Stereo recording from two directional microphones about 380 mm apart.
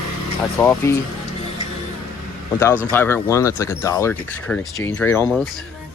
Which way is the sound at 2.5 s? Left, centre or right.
Centre.